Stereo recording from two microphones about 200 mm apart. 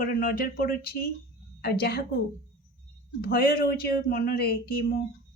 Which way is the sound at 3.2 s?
50° left (ahead or behind).